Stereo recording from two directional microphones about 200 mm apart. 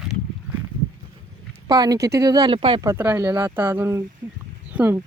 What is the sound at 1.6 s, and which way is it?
Speech, 20° right (ahead or behind).